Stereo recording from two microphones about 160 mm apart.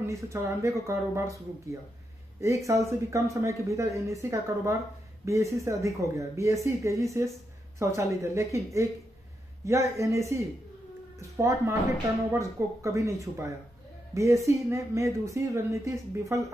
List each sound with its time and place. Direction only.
0.0 s speech: 20° right (ahead or behind)